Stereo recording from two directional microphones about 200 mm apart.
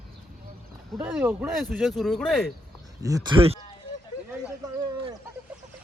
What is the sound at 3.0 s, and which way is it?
Speech, 15° right (ahead or behind).